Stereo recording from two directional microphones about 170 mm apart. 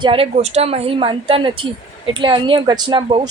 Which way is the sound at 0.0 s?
35° right (ahead or behind).